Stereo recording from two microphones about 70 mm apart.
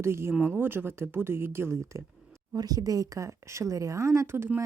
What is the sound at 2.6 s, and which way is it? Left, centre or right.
A woman's voice, right.